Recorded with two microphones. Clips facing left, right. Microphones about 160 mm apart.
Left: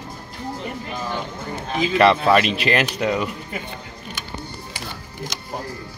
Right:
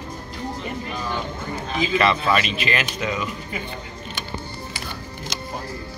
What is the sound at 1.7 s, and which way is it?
Speech, 60° left (ahead or behind).